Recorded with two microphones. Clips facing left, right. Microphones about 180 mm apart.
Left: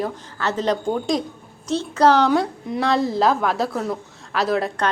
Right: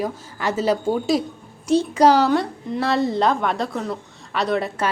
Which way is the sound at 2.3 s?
Centre (ahead or behind).